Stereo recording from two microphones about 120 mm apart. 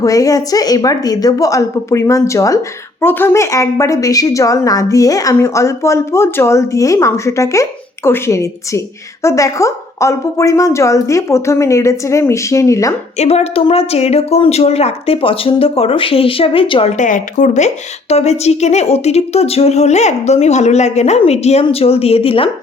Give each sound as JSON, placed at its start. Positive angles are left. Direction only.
{"t": 0.0, "sound": "a woman's voice", "side_deg": 30}
{"t": 13.1, "sound": "a woman's voice", "side_deg": 60}
{"t": 17.0, "sound": "speech", "side_deg": 90}
{"t": 18.1, "sound": "speech", "side_deg": 65}